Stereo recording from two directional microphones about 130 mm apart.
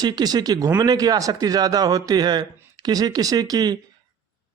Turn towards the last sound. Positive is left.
turn(degrees=-30)  # may be behind; listen again after turning